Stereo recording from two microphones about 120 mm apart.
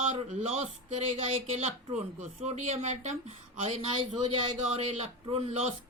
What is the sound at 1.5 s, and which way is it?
Speech, 60° right (ahead or behind).